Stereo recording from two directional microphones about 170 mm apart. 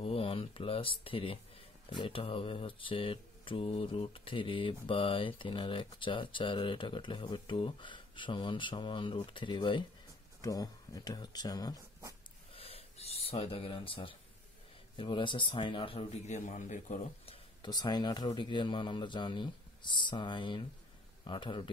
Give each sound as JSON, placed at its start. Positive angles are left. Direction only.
{"t": 0.0, "sound": "speech", "side_deg": 35}
{"t": 12.5, "sound": "a sound", "side_deg": 35}
{"t": 15.0, "sound": "speech", "side_deg": 30}
{"t": 17.6, "sound": "speech", "side_deg": 25}